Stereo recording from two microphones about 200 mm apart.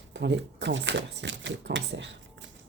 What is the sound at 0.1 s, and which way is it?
Speech, 60° right (ahead or behind).